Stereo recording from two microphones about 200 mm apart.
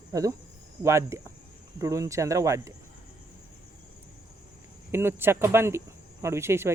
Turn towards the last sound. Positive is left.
turn(degrees=-10)  # may be behind; listen again after turning